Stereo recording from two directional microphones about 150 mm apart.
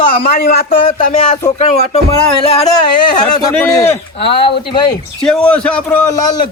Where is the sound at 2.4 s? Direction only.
40° left (ahead or behind).